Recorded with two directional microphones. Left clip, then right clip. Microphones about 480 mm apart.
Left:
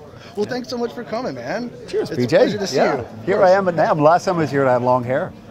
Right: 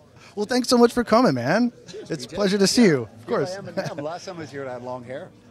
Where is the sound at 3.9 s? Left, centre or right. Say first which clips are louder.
Left 17 dB; left.